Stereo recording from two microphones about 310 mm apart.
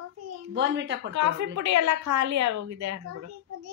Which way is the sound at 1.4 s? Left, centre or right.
Right.